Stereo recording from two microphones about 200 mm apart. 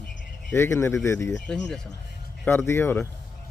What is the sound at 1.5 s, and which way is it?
Speech, 5° left (ahead or behind).